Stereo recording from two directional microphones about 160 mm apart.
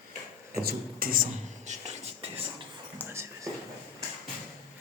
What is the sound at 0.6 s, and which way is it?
Speech, 70° right (ahead or behind).